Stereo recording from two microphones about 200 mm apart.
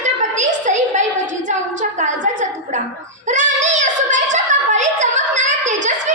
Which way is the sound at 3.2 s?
35° right (ahead or behind).